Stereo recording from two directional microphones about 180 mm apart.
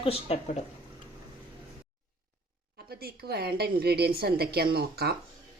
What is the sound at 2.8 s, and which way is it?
Speech, 60° right (ahead or behind).